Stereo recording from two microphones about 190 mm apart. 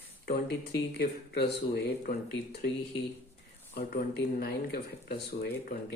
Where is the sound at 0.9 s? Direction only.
55° left (ahead or behind).